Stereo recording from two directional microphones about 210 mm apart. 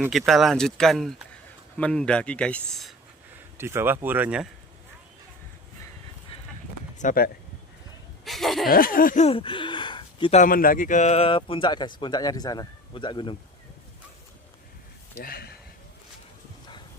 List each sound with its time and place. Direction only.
0.0 s speech: centre (ahead or behind)
3.6 s speech: 10° right (ahead or behind)
7.0 s speech: 40° left (ahead or behind)
8.2 s a sound: centre (ahead or behind)
8.7 s speech: 45° left (ahead or behind); by 10.4 s 25° left (ahead or behind)
10.4 s speech: 40° left (ahead or behind); by 13.3 s 20° left (ahead or behind)
15.2 s speech: 45° left (ahead or behind)